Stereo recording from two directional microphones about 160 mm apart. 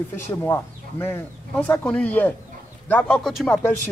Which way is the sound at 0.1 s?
15° left (ahead or behind).